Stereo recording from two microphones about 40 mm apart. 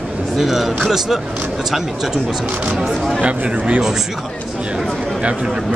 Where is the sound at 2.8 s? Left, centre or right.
Centre.